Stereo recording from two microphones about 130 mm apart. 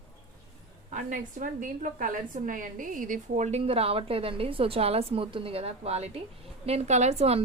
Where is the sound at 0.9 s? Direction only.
85° right.